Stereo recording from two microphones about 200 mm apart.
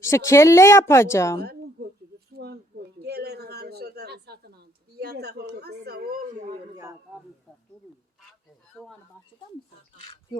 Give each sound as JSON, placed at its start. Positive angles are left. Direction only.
{"t": 0.0, "sound": "a woman's voice", "side_deg": 15}
{"t": 2.4, "sound": "a sound", "side_deg": -55}
{"t": 8.7, "sound": "speech", "side_deg": 0}